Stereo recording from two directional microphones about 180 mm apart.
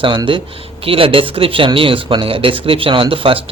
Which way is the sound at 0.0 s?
25° right (ahead or behind).